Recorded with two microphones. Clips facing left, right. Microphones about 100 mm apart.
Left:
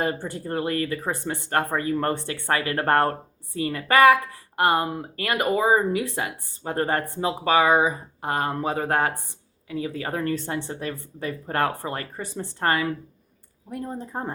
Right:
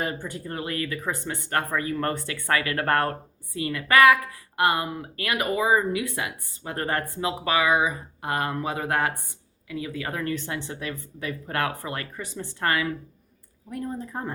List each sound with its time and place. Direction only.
0.0 s speech: 35° left (ahead or behind)